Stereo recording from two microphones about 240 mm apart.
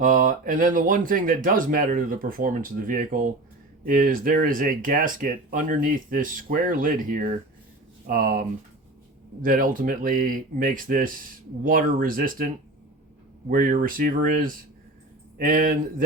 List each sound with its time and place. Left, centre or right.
0.0 s speech: right
13.5 s speech: right